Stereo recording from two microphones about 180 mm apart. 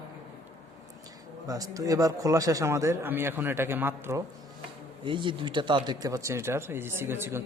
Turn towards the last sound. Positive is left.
turn(degrees=-15)  # may be behind; listen again after turning